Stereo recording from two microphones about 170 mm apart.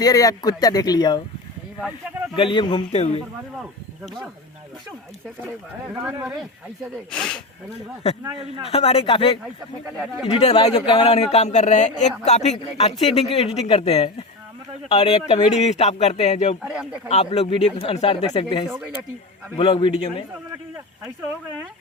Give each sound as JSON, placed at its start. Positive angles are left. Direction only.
{"t": 0.0, "sound": "speech", "side_deg": 20}
{"t": 2.3, "sound": "a man's voice", "side_deg": 30}
{"t": 3.6, "sound": "speech", "side_deg": 0}
{"t": 7.1, "sound": "speech", "side_deg": 5}
{"t": 8.0, "sound": "a man's voice", "side_deg": 35}
{"t": 16.6, "sound": "speech", "side_deg": -5}
{"t": 17.1, "sound": "a man's voice", "side_deg": 35}
{"t": 18.7, "sound": "speech", "side_deg": -5}
{"t": 19.5, "sound": "speech", "side_deg": 30}